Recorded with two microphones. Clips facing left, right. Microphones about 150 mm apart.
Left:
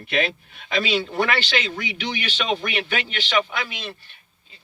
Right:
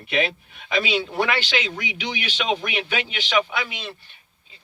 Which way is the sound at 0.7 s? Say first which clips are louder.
Even; 15° right (ahead or behind).